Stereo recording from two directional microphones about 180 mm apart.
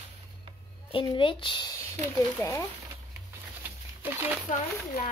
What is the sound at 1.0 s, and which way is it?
Speech, 25° left (ahead or behind).